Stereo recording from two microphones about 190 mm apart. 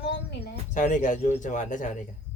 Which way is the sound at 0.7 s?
40° left (ahead or behind).